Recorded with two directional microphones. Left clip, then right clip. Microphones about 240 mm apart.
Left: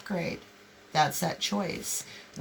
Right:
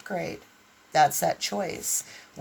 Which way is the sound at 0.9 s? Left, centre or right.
Right.